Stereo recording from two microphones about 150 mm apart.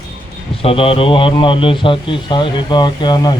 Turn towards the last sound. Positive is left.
turn(degrees=30)  # may be behind; listen again after turning